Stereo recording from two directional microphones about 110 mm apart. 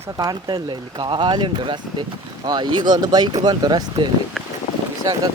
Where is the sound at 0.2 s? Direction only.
35° right (ahead or behind).